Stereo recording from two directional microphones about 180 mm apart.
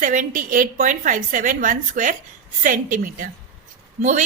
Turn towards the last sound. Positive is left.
turn(degrees=-45)  # may be behind; listen again after turning